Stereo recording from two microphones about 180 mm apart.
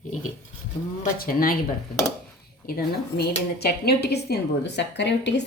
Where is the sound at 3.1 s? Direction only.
65° left (ahead or behind).